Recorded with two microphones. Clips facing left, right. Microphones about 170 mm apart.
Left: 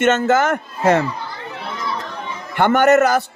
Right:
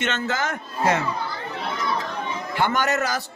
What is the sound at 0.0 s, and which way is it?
A man's voice, 50° left (ahead or behind).